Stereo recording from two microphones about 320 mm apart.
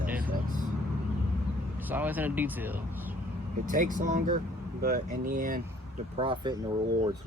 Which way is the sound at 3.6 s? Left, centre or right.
Right.